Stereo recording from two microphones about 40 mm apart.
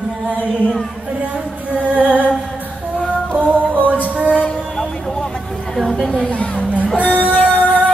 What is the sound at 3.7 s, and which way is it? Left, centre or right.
Music, right.